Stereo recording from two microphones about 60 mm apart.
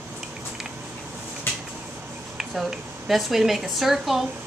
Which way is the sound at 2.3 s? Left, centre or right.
Centre.